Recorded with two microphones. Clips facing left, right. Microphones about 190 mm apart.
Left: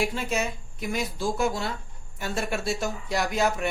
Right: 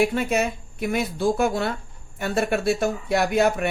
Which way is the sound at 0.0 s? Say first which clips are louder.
Right 6 dB; 60° right (ahead or behind).